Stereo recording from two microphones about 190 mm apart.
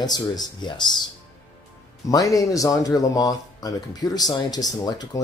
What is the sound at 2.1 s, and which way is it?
Speech, 20° left (ahead or behind).